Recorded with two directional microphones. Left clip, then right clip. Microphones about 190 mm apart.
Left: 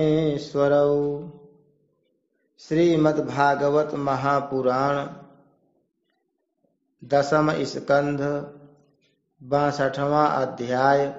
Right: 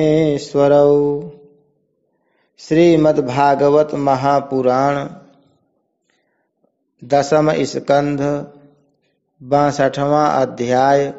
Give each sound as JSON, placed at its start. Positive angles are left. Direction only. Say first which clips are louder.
{"t": 0.0, "sound": "a man's voice", "louder": "right 7 dB", "side_deg": -35}
{"t": 2.5, "sound": "a man's voice", "louder": "right 8 dB", "side_deg": -40}
{"t": 7.1, "sound": "a man's voice", "louder": "right 7 dB", "side_deg": -35}
{"t": 9.5, "sound": "a man's voice", "louder": "right 8 dB", "side_deg": -35}